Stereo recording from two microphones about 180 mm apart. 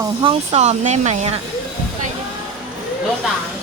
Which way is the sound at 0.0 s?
25° right (ahead or behind).